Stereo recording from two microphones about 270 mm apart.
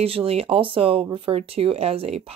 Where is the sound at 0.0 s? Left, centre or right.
Right.